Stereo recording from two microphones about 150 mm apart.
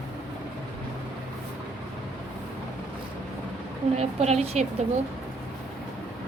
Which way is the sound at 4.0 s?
45° right (ahead or behind).